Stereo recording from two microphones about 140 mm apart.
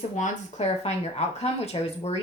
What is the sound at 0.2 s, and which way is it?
A woman's voice, 55° left (ahead or behind).